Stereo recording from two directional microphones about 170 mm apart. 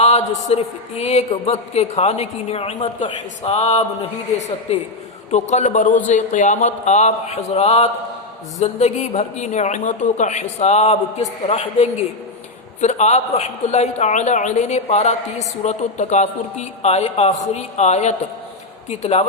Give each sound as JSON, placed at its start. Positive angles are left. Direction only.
{"t": 0.0, "sound": "a man's voice", "side_deg": 40}